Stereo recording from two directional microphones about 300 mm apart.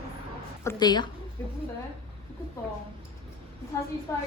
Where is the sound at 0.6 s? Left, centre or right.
Centre.